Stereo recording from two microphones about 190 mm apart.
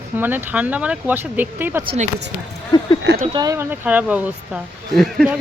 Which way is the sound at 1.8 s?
30° right (ahead or behind).